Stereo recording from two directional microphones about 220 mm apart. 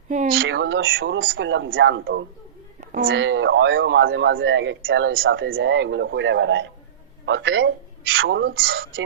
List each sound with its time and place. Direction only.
0.1 s speech: 35° right (ahead or behind)
0.3 s a man's voice: 55° right (ahead or behind)
2.9 s a man's voice: 45° right (ahead or behind); by 8.2 s 65° right (ahead or behind)
8.2 s speech: 50° right (ahead or behind)
8.7 s a man's voice: 60° right (ahead or behind)